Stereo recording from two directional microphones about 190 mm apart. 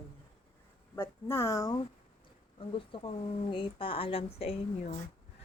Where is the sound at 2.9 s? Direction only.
25° left (ahead or behind).